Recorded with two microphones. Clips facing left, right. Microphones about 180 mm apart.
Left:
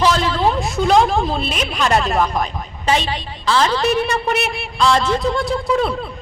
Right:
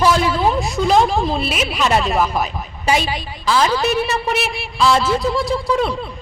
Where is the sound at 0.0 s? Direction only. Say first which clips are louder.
Right 1 dB; 10° right (ahead or behind).